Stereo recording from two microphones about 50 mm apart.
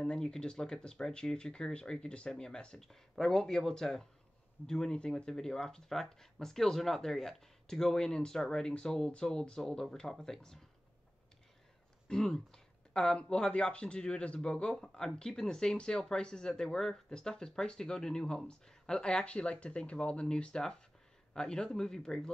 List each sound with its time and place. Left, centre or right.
0.0 s speech: centre
12.1 s a man's voice: centre